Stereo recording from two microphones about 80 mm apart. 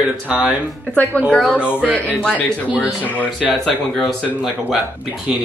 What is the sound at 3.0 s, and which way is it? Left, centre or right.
Speech, centre.